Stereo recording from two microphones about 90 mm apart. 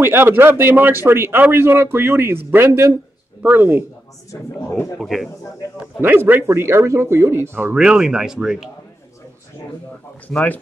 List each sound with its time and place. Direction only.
0.0 s speech: 25° right (ahead or behind)
4.3 s speech: 35° left (ahead or behind)
4.9 s speech: centre (ahead or behind)
5.9 s speech: 25° right (ahead or behind)
7.7 s speech: 10° right (ahead or behind)
10.2 s speech: 15° left (ahead or behind)